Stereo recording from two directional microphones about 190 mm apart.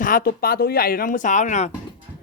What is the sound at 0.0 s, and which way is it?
Speech, 45° left (ahead or behind).